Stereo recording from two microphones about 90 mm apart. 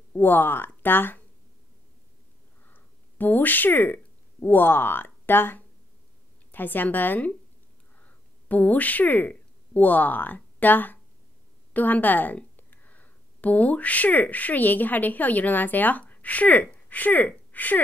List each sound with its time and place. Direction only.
0.2 s speech: 20° left (ahead or behind)
2.6 s a woman's voice: 20° left (ahead or behind)